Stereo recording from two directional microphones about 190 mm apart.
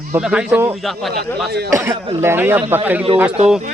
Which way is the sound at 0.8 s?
Centre (ahead or behind).